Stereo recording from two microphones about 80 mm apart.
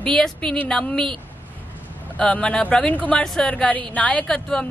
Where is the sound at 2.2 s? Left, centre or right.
Centre.